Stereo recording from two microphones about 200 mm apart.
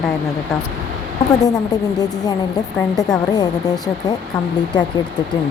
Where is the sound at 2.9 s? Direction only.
20° left (ahead or behind).